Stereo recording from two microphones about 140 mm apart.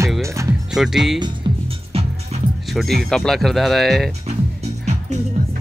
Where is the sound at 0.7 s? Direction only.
5° right (ahead or behind).